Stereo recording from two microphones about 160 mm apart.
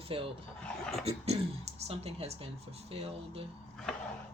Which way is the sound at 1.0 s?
40° right (ahead or behind).